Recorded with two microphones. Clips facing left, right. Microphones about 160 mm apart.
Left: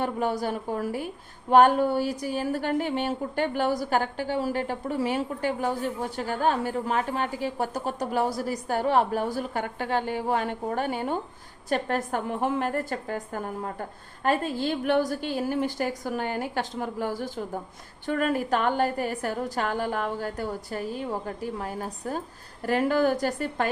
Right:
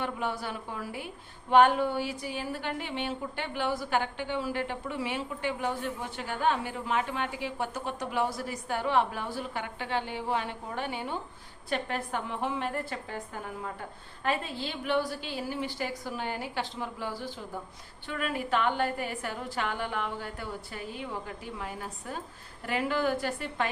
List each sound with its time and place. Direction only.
0.0 s a woman's voice: 40° left (ahead or behind)